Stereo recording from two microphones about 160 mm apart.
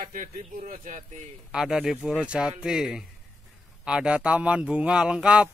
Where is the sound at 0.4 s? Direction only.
50° right (ahead or behind).